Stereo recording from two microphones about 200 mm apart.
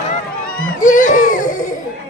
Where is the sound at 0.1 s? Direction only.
45° left (ahead or behind).